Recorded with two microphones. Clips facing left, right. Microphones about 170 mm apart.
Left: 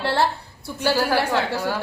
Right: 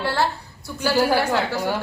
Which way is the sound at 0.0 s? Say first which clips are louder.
Left 1 dB; 25° left (ahead or behind).